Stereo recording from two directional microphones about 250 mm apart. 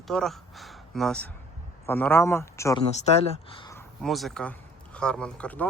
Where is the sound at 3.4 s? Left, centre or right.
Centre.